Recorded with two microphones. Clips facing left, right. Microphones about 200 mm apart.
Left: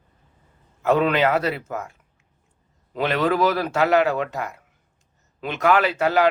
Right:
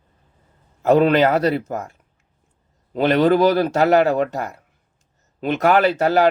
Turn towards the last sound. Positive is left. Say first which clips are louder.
# right 3 dB
turn(degrees=-35)  # may be behind; listen again after turning